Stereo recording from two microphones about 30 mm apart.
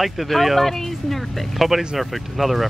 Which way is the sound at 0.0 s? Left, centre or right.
Centre.